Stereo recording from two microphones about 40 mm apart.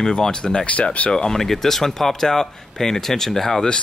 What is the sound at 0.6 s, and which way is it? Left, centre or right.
Speech, left.